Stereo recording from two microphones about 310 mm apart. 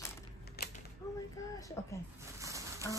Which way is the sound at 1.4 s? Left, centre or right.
Centre.